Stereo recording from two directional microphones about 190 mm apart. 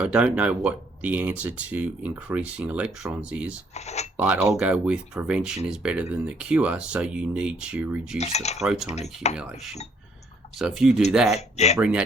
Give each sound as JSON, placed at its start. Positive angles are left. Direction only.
{"t": 0.0, "sound": "speech", "side_deg": -5}
{"t": 3.8, "sound": "speech", "side_deg": 35}
{"t": 4.2, "sound": "speech", "side_deg": -10}
{"t": 8.2, "sound": "speech", "side_deg": 35}
{"t": 8.6, "sound": "speech", "side_deg": -5}
{"t": 9.2, "sound": "speech", "side_deg": 35}
{"t": 10.6, "sound": "speech", "side_deg": 0}
{"t": 11.3, "sound": "speech", "side_deg": 35}
{"t": 11.8, "sound": "speech", "side_deg": -5}